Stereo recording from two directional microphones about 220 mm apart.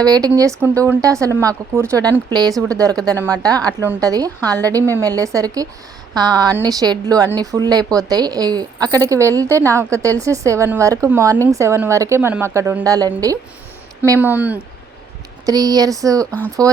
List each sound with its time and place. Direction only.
0.0 s a woman's voice: 15° right (ahead or behind)